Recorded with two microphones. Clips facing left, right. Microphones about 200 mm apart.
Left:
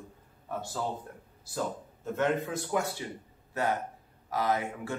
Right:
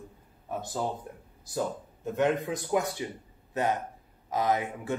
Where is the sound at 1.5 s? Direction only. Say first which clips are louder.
Right 2 dB; 15° right (ahead or behind).